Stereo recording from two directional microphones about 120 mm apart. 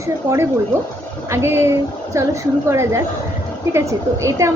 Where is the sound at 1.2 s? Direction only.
20° right (ahead or behind).